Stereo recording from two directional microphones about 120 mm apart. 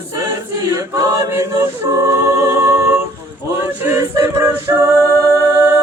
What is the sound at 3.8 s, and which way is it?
Music, 20° right (ahead or behind).